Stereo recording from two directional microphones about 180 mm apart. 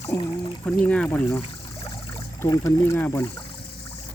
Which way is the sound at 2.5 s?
15° left (ahead or behind).